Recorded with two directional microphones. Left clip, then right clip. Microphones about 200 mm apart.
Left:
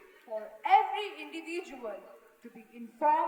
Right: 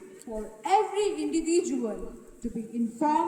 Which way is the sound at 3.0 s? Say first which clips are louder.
Right 1 dB; 60° right (ahead or behind).